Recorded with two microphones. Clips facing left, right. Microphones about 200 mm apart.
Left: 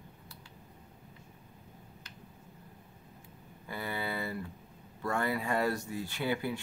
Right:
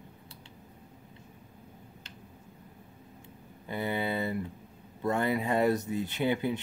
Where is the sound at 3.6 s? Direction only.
20° right (ahead or behind).